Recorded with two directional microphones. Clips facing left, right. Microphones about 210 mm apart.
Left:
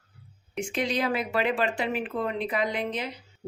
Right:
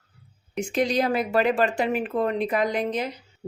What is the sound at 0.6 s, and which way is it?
Speech, 40° right (ahead or behind).